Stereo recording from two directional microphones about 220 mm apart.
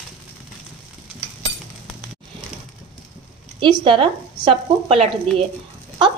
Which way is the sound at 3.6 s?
20° right (ahead or behind).